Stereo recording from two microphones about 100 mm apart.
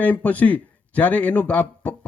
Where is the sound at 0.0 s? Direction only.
15° left (ahead or behind).